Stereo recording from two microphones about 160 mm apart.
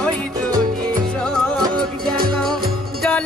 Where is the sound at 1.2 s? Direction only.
5° left (ahead or behind).